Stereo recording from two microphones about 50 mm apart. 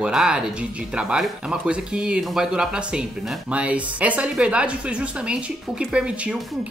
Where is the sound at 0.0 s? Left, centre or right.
Centre.